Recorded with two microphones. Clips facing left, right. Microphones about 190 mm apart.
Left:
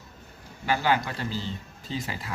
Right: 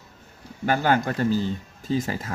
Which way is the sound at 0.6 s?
50° right (ahead or behind).